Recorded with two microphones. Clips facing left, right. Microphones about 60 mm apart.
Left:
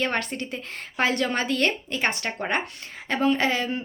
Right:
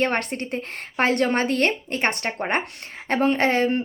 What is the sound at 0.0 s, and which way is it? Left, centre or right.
A woman's voice, right.